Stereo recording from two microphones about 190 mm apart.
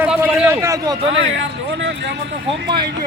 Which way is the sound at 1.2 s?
75° right (ahead or behind).